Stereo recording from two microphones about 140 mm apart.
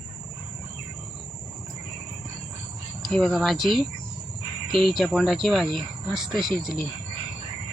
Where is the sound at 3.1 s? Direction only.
5° left (ahead or behind).